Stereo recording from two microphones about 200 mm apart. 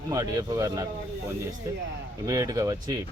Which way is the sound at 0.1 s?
15° right (ahead or behind).